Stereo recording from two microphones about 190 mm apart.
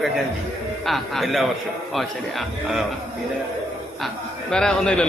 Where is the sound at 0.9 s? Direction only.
Centre (ahead or behind).